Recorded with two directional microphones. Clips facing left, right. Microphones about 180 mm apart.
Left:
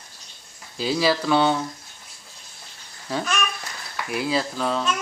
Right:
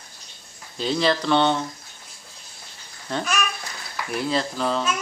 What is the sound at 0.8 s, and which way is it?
Speech, 5° left (ahead or behind).